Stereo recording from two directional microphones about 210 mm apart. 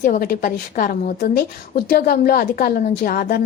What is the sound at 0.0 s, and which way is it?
A woman's voice, 45° left (ahead or behind).